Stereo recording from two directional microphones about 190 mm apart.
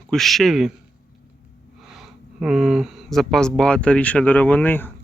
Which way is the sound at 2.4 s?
5° right (ahead or behind).